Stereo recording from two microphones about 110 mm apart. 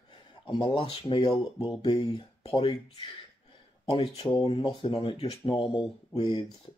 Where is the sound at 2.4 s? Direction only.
60° left (ahead or behind).